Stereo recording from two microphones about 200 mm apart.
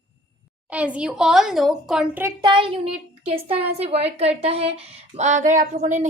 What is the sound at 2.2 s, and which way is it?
A child's voice, 25° right (ahead or behind).